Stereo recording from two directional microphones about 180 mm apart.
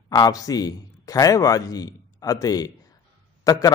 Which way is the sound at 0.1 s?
20° left (ahead or behind).